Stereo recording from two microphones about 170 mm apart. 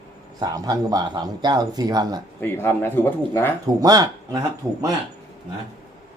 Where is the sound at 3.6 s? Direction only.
20° right (ahead or behind).